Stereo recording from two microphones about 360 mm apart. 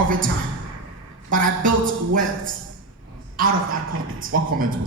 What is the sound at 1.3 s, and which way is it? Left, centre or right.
Speech, right.